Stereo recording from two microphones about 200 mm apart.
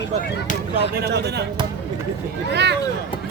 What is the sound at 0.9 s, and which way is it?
Speech, 55° right (ahead or behind).